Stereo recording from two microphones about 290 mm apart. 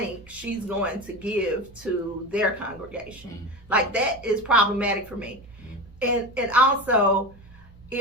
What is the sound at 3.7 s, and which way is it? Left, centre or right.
A woman's voice, centre.